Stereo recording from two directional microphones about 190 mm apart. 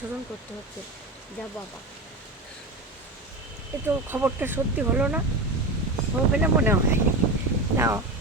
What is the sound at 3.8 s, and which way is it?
Speech, 10° right (ahead or behind).